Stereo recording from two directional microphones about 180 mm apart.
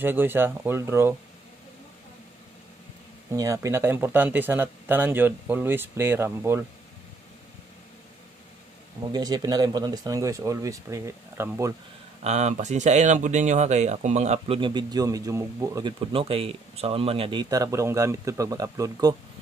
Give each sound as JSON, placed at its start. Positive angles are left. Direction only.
{"t": 0.0, "sound": "speech", "side_deg": -10}
{"t": 3.3, "sound": "speech", "side_deg": -15}
{"t": 9.1, "sound": "speech", "side_deg": -20}
{"t": 12.2, "sound": "speech", "side_deg": -40}
{"t": 14.6, "sound": "speech", "side_deg": -25}
{"t": 16.1, "sound": "speech", "side_deg": -30}